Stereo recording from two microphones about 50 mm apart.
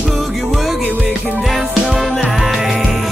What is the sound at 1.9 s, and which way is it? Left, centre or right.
Music, centre.